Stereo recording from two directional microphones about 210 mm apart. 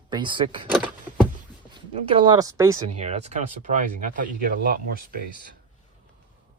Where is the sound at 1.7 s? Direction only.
25° right (ahead or behind).